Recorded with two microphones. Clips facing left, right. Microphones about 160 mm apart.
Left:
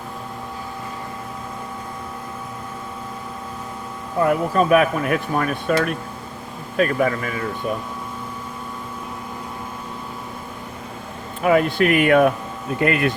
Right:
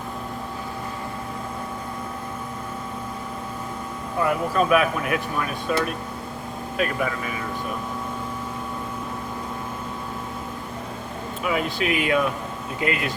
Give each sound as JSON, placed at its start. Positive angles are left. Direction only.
{"t": 4.3, "sound": "speech", "side_deg": 45}
{"t": 6.7, "sound": "speech", "side_deg": 45}
{"t": 11.4, "sound": "speech", "side_deg": 55}